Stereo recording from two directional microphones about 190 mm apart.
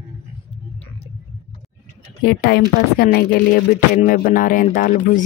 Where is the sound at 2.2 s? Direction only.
55° left (ahead or behind).